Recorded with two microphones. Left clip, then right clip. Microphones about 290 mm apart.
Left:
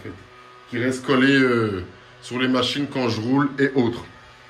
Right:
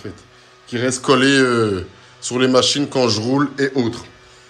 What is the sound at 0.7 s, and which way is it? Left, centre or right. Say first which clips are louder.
A man's voice: right 6 dB; centre.